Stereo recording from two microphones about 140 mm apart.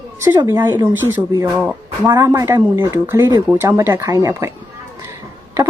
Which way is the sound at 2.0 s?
25° right (ahead or behind).